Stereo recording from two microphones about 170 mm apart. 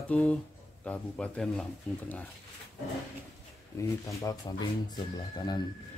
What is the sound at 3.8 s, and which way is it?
Speech, 20° left (ahead or behind).